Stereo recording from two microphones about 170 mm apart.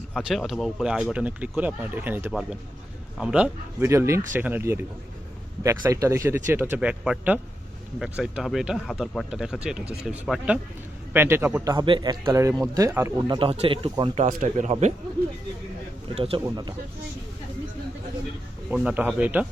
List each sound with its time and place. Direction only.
0.1 s speech: 5° right (ahead or behind)
11.7 s speech: 25° right (ahead or behind)
13.3 s speech: 30° right (ahead or behind)
14.3 s speech: 50° right (ahead or behind)
16.1 s speech: 35° right (ahead or behind)
18.8 s speech: 5° right (ahead or behind)